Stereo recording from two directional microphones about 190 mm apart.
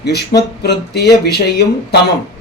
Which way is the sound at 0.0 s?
60° left (ahead or behind).